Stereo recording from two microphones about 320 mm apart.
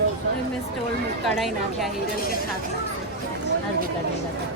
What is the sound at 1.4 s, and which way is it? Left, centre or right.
Speech, centre.